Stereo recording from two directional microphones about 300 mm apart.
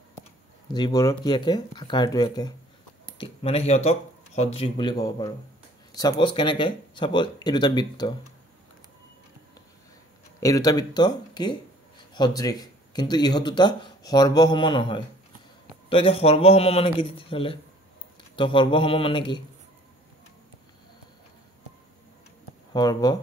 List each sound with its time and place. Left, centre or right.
0.7 s speech: centre
10.4 s a man's voice: centre
22.7 s speech: centre